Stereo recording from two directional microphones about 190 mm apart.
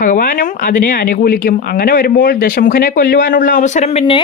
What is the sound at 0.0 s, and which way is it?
Speech, 45° left (ahead or behind).